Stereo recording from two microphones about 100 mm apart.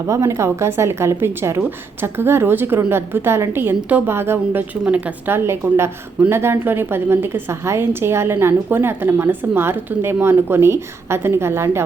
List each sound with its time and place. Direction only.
0.1 s a woman's voice: 30° right (ahead or behind)